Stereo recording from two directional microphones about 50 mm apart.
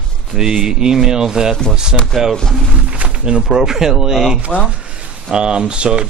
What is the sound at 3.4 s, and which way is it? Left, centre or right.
Speech, centre.